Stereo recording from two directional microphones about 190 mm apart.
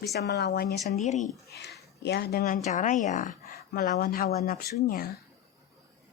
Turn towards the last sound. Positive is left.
turn(degrees=50)  # may be behind; listen again after turning